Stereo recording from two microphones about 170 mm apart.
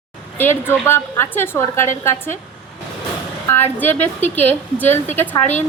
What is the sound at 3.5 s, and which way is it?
A woman's voice, 10° left (ahead or behind).